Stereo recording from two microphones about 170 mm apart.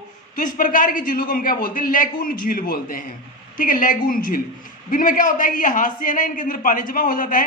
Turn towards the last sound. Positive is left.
turn(degrees=50)  # may be behind; listen again after turning